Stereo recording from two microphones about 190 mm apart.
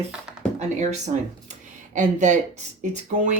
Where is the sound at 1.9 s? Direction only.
40° right (ahead or behind).